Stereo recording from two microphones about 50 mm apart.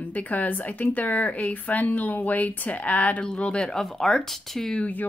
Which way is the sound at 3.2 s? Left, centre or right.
Centre.